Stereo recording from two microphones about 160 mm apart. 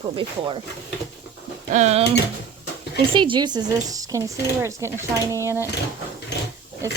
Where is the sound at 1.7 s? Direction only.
45° right (ahead or behind).